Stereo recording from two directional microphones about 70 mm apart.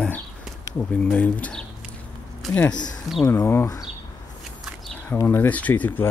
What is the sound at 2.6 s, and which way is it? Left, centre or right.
Speech, left.